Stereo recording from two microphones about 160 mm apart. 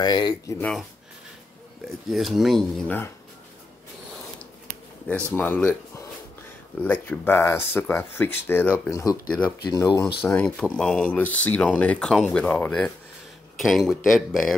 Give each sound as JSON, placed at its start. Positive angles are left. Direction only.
{"t": 0.0, "sound": "speech", "side_deg": 25}
{"t": 0.6, "sound": "speech", "side_deg": 5}
{"t": 2.0, "sound": "speech", "side_deg": 0}
{"t": 5.3, "sound": "speech", "side_deg": 10}
{"t": 10.2, "sound": "speech", "side_deg": 5}